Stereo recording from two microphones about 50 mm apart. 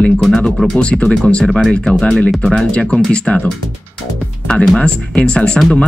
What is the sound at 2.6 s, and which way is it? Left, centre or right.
Speech, left.